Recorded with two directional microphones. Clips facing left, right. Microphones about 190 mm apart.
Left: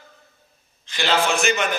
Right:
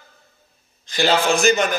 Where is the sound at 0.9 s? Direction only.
40° right (ahead or behind).